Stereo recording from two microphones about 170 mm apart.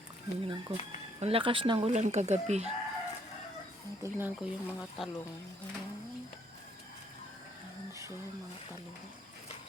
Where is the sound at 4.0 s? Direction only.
15° right (ahead or behind).